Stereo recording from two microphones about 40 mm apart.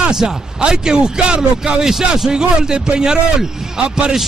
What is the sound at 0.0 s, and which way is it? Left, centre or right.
Speech, right.